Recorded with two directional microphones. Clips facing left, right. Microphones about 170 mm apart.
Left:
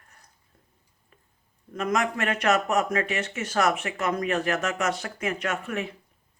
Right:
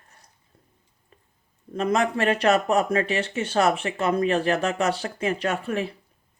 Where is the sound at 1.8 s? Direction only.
30° right (ahead or behind).